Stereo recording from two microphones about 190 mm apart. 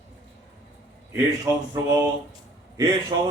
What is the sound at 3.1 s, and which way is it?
Speech, 25° right (ahead or behind).